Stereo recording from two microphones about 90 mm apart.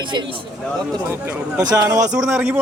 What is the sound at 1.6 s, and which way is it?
Speech, 45° right (ahead or behind).